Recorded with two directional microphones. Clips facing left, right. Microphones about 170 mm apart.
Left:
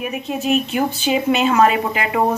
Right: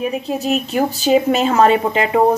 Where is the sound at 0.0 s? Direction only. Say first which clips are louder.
Right 3 dB; 35° right (ahead or behind).